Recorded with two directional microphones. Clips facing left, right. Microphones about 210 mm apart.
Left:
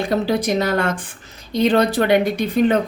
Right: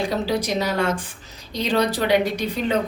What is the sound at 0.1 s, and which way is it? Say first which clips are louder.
A woman's voice: left 4 dB; 55° left (ahead or behind).